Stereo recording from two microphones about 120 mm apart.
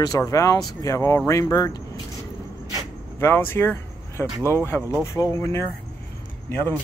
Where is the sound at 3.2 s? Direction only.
20° left (ahead or behind).